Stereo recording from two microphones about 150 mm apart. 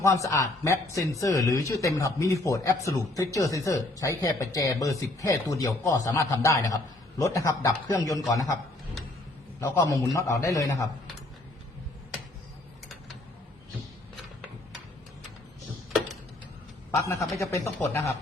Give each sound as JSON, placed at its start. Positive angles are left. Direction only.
{"t": 0.0, "sound": "speech", "side_deg": 20}
{"t": 9.6, "sound": "speech", "side_deg": 20}
{"t": 16.9, "sound": "speech", "side_deg": 20}